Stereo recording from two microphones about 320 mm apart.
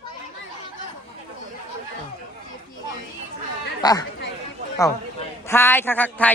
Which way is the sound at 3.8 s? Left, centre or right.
Centre.